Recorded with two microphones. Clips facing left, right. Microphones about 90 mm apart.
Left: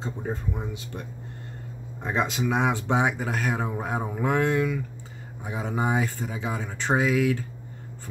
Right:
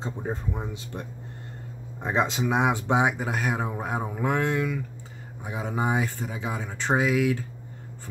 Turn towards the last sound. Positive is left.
turn(degrees=-5)  # may be behind; listen again after turning